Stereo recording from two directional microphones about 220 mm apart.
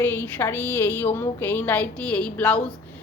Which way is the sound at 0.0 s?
10° left (ahead or behind).